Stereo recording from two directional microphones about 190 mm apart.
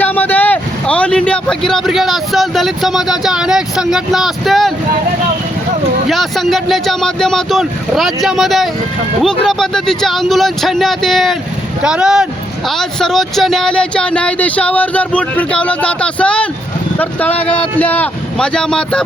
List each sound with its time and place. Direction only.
0.0 s speech: 10° left (ahead or behind)
6.1 s speech: centre (ahead or behind)